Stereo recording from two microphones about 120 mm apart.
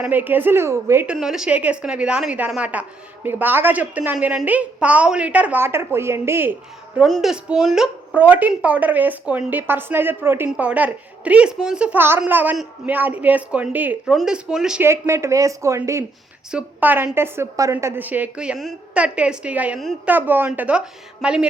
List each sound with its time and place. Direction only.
0.0 s a woman's voice: 15° right (ahead or behind)
1.0 s a woman's voice: 5° right (ahead or behind); by 6.5 s 20° right (ahead or behind)
7.0 s a woman's voice: 5° right (ahead or behind)
14.8 s speech: 20° right (ahead or behind)
16.5 s a woman's voice: 10° right (ahead or behind)